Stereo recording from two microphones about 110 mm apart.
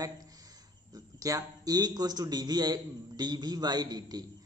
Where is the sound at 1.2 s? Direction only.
35° right (ahead or behind).